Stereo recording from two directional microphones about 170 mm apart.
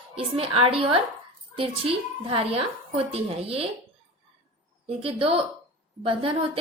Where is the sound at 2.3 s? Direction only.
35° right (ahead or behind).